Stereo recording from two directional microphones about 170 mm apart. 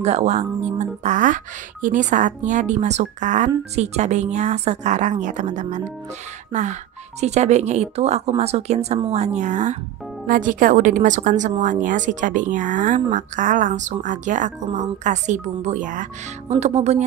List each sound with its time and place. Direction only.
0.0 s a woman's voice: 40° right (ahead or behind)